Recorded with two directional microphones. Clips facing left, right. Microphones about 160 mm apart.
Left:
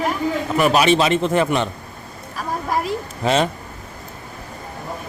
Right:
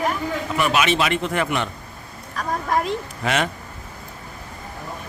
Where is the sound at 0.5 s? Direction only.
40° left (ahead or behind).